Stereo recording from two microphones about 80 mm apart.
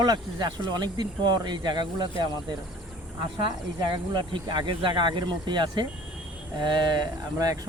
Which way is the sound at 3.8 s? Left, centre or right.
Right.